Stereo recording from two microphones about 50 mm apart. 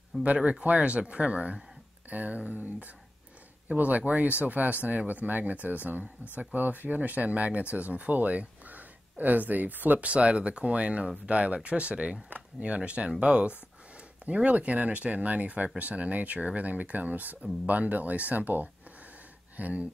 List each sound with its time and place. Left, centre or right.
0.4 s speech: right